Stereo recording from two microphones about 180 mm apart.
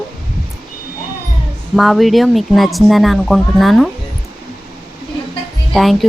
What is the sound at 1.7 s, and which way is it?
Speech, centre (ahead or behind).